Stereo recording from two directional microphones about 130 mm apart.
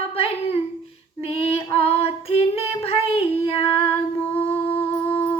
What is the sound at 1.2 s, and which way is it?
Female singing, 50° left (ahead or behind).